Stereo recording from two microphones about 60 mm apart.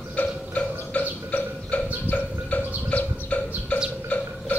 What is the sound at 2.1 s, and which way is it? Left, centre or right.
Music, left.